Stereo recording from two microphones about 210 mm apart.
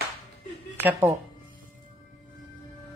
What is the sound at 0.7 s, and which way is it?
Speech, 10° right (ahead or behind).